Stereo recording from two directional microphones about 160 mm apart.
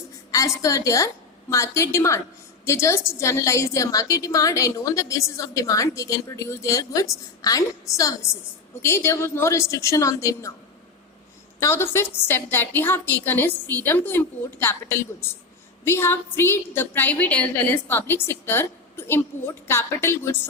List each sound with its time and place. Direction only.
0.3 s a woman's voice: 20° left (ahead or behind)
11.6 s a woman's voice: 15° left (ahead or behind)